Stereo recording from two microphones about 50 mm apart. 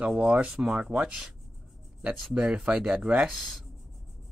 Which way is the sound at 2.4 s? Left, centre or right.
Centre.